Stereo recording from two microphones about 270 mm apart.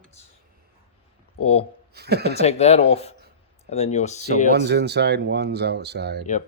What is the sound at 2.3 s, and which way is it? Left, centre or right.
Speech, left.